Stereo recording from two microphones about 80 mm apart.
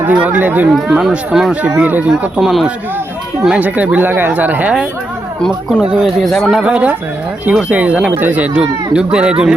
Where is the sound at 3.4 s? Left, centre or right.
Centre.